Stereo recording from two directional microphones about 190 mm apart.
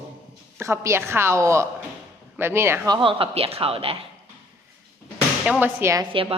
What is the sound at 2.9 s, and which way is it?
Speech, 25° right (ahead or behind).